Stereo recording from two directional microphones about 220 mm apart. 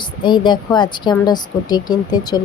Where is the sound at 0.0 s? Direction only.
20° left (ahead or behind).